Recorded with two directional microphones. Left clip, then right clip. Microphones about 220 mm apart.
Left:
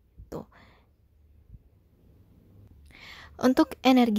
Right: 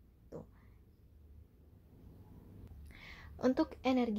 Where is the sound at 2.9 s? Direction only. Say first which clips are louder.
Left 8 dB; 20° left (ahead or behind); by 4.2 s 45° left (ahead or behind).